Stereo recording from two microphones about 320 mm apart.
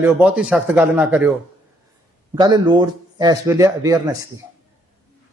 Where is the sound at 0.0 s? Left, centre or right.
Centre.